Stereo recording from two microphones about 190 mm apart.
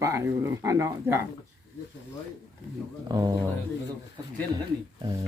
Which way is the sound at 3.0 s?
20° right (ahead or behind).